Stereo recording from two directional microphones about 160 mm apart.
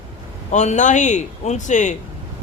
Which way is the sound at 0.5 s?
45° left (ahead or behind).